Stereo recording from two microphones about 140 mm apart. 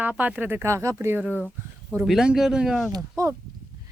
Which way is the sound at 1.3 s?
10° left (ahead or behind).